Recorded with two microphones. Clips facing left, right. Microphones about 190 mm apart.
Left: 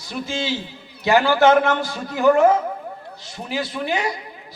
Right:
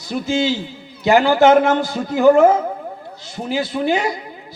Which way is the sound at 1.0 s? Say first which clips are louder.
Right 3 dB; 25° right (ahead or behind).